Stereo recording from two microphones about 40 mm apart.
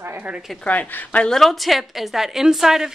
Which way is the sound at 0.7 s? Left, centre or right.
Left.